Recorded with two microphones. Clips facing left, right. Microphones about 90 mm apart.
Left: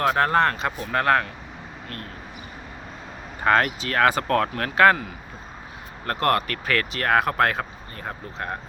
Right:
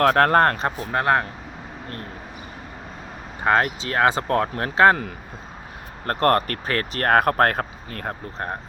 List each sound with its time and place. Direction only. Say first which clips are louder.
0.0 s speech: right 4 dB; 60° right (ahead or behind)
0.4 s speech: right 3 dB; 40° right (ahead or behind)
0.9 s speech: even; 25° right (ahead or behind)
3.4 s speech: even; 20° right (ahead or behind)
6.1 s speech: right 3 dB; 40° right (ahead or behind)